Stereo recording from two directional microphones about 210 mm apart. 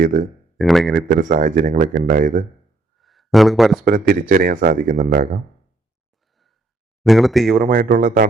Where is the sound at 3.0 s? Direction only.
Centre (ahead or behind).